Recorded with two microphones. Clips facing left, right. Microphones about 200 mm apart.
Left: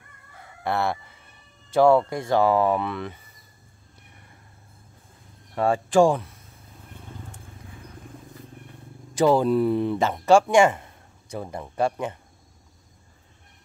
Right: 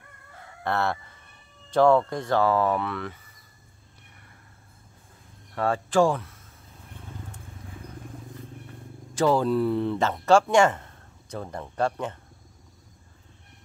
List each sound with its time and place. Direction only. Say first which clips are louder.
0.7 s speech: left 1 dB; 10° left (ahead or behind)
5.5 s speech: left 4 dB; 15° left (ahead or behind)
9.1 s speech: left 3 dB; 15° left (ahead or behind)